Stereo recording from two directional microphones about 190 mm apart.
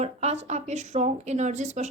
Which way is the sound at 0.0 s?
35° right (ahead or behind).